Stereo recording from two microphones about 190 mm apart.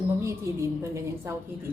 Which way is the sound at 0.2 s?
15° right (ahead or behind).